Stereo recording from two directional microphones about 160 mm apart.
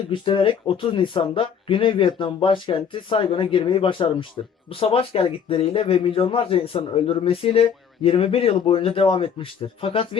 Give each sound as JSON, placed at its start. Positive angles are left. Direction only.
{"t": 0.1, "sound": "a man's voice", "side_deg": 30}